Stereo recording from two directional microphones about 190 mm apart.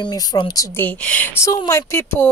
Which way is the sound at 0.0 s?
20° left (ahead or behind).